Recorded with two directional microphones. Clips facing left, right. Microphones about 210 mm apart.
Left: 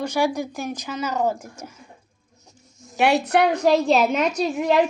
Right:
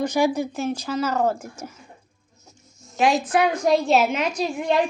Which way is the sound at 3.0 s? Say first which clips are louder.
Left 1 dB; 65° left (ahead or behind).